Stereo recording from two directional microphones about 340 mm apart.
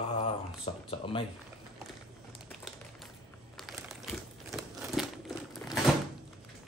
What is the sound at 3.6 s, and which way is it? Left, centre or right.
Crumpling, centre.